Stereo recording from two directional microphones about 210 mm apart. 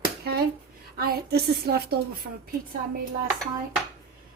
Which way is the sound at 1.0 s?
50° right (ahead or behind).